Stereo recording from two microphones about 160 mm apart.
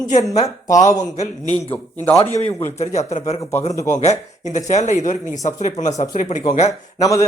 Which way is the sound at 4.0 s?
45° left (ahead or behind).